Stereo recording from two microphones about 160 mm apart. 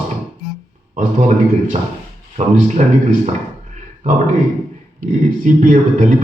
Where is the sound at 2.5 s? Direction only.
55° right (ahead or behind).